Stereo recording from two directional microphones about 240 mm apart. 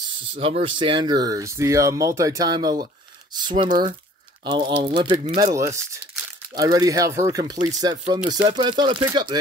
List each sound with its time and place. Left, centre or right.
0.2 s speech: right